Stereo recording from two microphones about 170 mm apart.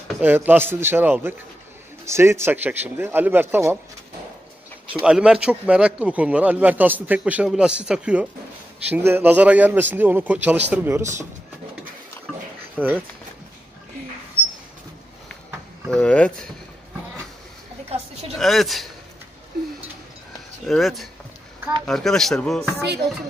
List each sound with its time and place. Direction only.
0.2 s a man's voice: 10° right (ahead or behind)
5.0 s a man's voice: 5° right (ahead or behind)
12.7 s speech: 10° right (ahead or behind)
15.9 s speech: 5° left (ahead or behind)
18.4 s speech: centre (ahead or behind)
20.6 s speech: centre (ahead or behind)